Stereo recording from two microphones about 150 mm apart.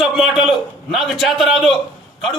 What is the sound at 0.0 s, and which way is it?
A man's voice, 5° right (ahead or behind).